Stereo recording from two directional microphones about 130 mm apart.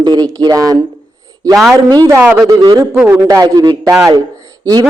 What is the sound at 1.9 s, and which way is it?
Speech, 30° right (ahead or behind).